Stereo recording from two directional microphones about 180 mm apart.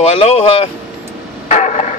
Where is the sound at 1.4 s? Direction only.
40° left (ahead or behind).